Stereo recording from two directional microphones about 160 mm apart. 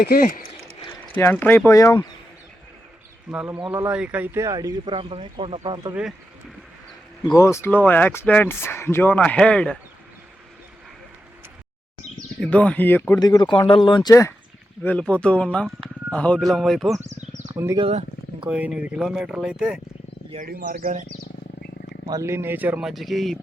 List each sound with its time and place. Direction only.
0.0 s speech: 65° left (ahead or behind)
1.1 s speech: 10° left (ahead or behind)
3.3 s a man's voice: 10° right (ahead or behind)
4.4 s speech: 20° right (ahead or behind)
7.3 s speech: 20° left (ahead or behind)
12.4 s speech: 10° left (ahead or behind)
13.1 s speech: 25° left (ahead or behind)
14.1 s speech: 15° left (ahead or behind)
14.8 s speech: 5° left (ahead or behind)
17.1 s a sound: 45° right (ahead or behind)
17.7 s speech: 35° right (ahead or behind)
18.4 s speech: 10° right (ahead or behind)
20.4 s speech: 65° right (ahead or behind)
22.1 s a man's voice: 15° right (ahead or behind); by 23.4 s centre (ahead or behind)